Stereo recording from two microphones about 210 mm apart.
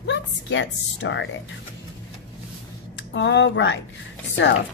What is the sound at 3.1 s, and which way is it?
A woman's voice, 55° left (ahead or behind).